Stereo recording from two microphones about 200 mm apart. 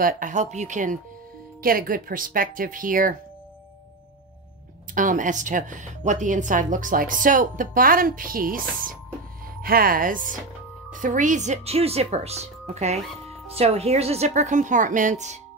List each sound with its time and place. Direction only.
0.0 s a woman's voice: 40° right (ahead or behind)
4.9 s a woman's voice: 40° right (ahead or behind)